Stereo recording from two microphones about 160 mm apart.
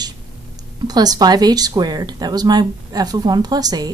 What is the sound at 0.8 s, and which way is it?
Speech, 25° right (ahead or behind).